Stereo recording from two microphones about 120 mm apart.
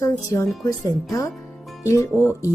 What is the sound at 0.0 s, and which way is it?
Speech, 25° left (ahead or behind).